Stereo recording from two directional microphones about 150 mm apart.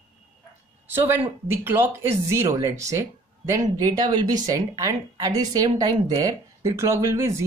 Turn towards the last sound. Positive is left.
turn(degrees=-20)  # may be behind; listen again after turning